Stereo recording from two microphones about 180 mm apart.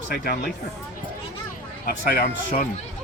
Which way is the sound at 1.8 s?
50° left (ahead or behind).